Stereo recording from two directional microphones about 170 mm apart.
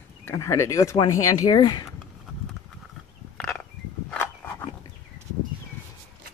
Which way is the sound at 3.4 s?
5° left (ahead or behind).